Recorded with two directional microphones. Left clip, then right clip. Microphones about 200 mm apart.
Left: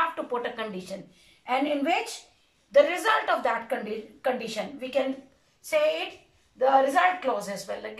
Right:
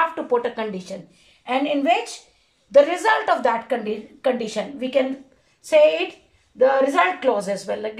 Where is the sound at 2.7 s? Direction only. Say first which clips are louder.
Right 5 dB; 35° right (ahead or behind).